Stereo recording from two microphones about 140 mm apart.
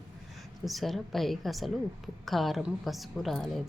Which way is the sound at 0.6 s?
Centre (ahead or behind).